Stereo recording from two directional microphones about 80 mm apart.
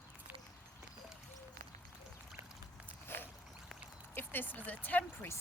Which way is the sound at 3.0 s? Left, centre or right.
Left.